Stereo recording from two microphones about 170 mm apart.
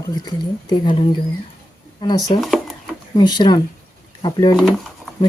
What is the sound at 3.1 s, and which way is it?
Speech, 25° left (ahead or behind).